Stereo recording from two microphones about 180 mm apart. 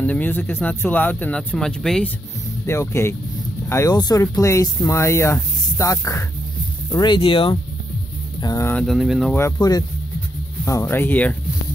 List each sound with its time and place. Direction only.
0.0 s speech: 10° left (ahead or behind)
2.6 s speech: 15° left (ahead or behind)
8.4 s a sound: 20° left (ahead or behind)
8.7 s speech: centre (ahead or behind)
9.6 s speech: 20° left (ahead or behind)